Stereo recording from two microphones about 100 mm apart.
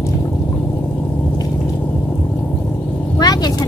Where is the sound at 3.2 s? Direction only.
40° left (ahead or behind).